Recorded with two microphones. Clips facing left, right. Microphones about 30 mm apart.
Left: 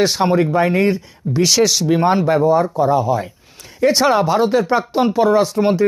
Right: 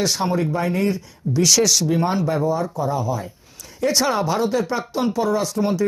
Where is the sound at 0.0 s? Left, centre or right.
Left.